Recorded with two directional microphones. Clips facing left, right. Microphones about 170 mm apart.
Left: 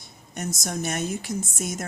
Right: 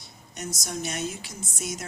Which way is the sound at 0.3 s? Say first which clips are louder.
Left 4 dB; 50° left (ahead or behind).